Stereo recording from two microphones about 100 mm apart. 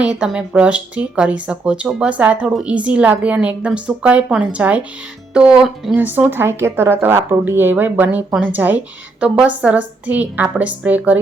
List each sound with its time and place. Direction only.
0.0 s speech: 10° right (ahead or behind)
5.9 s speech: 20° right (ahead or behind)